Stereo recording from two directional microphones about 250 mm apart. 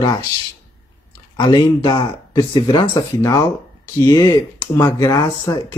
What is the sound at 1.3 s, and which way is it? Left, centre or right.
Speech, centre.